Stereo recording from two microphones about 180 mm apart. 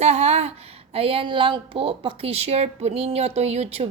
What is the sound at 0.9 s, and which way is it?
A woman's voice, 30° right (ahead or behind).